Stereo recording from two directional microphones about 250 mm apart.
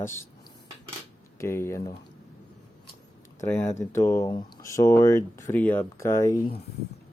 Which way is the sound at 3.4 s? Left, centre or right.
Centre.